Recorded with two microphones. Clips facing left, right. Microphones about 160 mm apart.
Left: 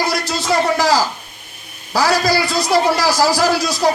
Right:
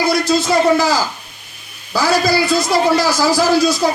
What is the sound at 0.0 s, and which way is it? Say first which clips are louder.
A man's voice: right 5 dB; 80° left.